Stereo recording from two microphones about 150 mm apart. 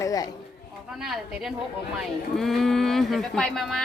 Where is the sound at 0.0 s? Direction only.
25° left (ahead or behind).